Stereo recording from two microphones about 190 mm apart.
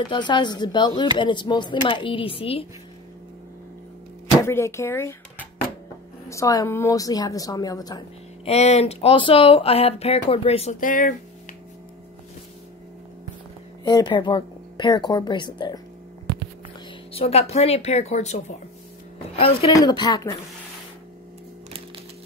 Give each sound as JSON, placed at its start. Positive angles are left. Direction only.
{"t": 0.1, "sound": "speech", "side_deg": 25}
{"t": 4.5, "sound": "a woman's voice", "side_deg": 15}
{"t": 6.2, "sound": "a woman's voice", "side_deg": 15}
{"t": 8.5, "sound": "speech", "side_deg": 35}
{"t": 13.8, "sound": "speech", "side_deg": 25}
{"t": 17.1, "sound": "speech", "side_deg": 30}